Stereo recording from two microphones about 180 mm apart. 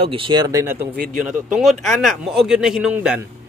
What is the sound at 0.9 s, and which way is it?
Speech, 55° right (ahead or behind).